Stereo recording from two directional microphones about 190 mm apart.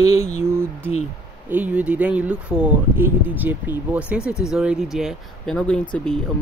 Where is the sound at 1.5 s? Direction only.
5° right (ahead or behind).